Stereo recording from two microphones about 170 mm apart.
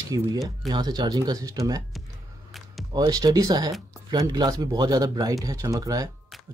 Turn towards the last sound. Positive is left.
turn(degrees=-20)  # may be behind; listen again after turning